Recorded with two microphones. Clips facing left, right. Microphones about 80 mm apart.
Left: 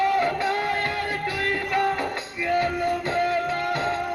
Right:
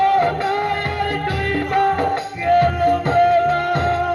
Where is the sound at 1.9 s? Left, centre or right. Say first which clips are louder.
Right 8 dB; right.